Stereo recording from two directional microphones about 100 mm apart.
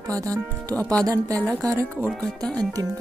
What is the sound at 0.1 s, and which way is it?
Speech, 35° right (ahead or behind).